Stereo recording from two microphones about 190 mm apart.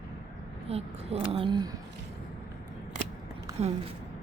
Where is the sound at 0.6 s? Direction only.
30° right (ahead or behind).